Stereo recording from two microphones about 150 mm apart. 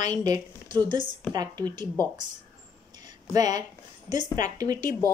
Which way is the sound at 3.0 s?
25° right (ahead or behind).